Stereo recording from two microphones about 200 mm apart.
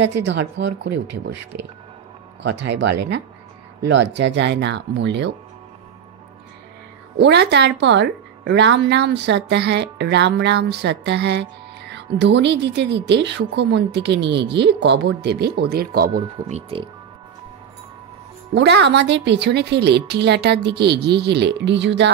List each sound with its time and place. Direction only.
0.0 s a woman's voice: 60° right (ahead or behind)
7.2 s a woman's voice: 60° right (ahead or behind)
16.4 s speech: 30° right (ahead or behind)
18.5 s a woman's voice: 60° right (ahead or behind)